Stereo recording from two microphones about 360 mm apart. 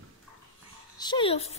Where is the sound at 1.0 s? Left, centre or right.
Centre.